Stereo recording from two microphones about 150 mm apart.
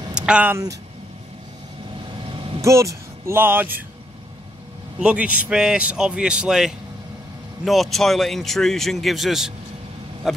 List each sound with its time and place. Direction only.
0.2 s speech: 10° right (ahead or behind)
2.6 s speech: 20° right (ahead or behind)
5.0 s a man's voice: 10° right (ahead or behind)